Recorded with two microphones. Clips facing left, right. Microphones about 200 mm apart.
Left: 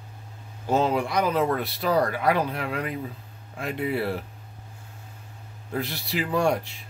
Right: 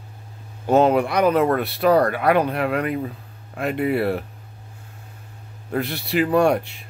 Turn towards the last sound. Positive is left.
turn(degrees=-60)  # may be behind; listen again after turning